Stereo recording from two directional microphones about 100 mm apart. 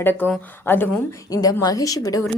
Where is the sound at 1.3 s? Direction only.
40° left (ahead or behind).